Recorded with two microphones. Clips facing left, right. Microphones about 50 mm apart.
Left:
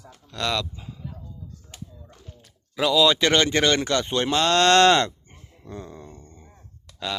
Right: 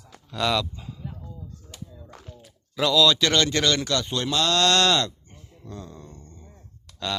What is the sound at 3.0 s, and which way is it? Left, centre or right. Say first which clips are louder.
Speech: left 2 dB; left.